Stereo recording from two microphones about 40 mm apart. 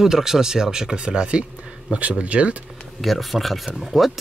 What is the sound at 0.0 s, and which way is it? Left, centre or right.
Speech, centre.